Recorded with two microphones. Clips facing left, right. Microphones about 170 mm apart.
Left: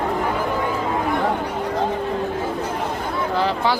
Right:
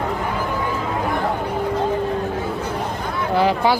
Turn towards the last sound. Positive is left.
turn(degrees=-10)  # may be behind; listen again after turning